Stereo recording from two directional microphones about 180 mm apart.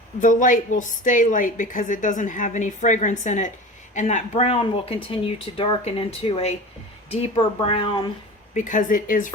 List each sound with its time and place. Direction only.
0.2 s a woman's voice: 45° left (ahead or behind); by 8.1 s 25° left (ahead or behind)
8.5 s a woman's voice: 45° left (ahead or behind)